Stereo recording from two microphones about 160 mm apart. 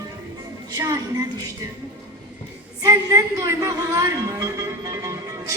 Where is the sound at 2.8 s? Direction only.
20° right (ahead or behind).